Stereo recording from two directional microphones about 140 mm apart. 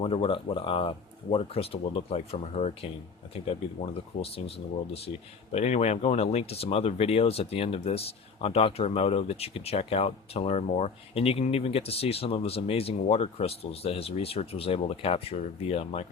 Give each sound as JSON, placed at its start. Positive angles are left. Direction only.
{"t": 0.0, "sound": "speech", "side_deg": 40}
{"t": 4.2, "sound": "speech", "side_deg": 45}